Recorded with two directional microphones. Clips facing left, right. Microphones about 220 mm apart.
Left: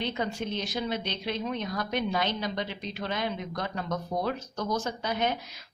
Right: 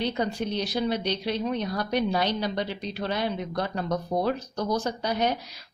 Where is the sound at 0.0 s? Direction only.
35° right (ahead or behind).